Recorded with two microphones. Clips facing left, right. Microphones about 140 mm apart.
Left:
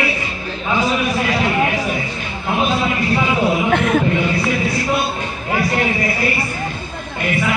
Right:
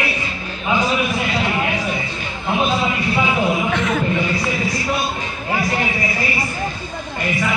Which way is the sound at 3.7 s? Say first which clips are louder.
Left 4 dB; 55° left (ahead or behind).